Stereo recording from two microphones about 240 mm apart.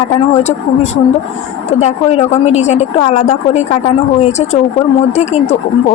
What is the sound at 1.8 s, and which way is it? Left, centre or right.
A woman's voice, left.